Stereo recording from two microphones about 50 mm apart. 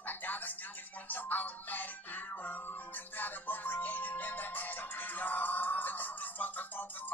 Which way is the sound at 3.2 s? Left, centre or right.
Left.